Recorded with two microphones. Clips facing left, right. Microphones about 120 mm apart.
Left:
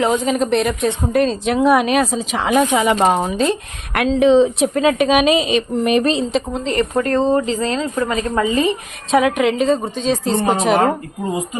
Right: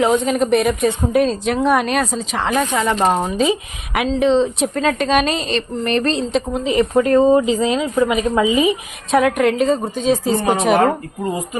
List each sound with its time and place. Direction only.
0.0 s speech: centre (ahead or behind)
3.4 s speech: centre (ahead or behind)
9.1 s speech: centre (ahead or behind)
10.3 s speech: 25° left (ahead or behind)